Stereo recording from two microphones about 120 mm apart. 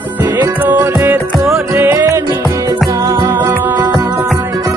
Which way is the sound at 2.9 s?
30° right (ahead or behind).